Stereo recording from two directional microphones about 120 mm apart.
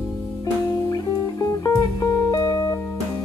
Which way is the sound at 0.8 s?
30° left (ahead or behind).